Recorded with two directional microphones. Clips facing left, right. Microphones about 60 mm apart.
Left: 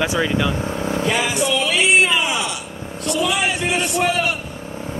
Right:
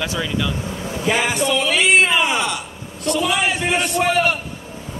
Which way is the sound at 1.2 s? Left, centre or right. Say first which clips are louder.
Right 1 dB; right.